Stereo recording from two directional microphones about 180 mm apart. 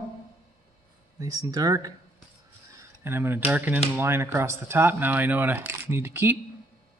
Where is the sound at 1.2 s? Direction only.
20° right (ahead or behind).